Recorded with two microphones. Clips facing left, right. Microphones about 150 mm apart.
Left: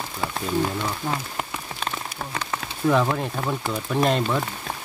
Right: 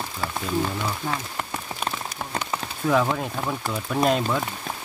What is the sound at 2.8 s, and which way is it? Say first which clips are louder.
Speech: left 1 dB; centre (ahead or behind).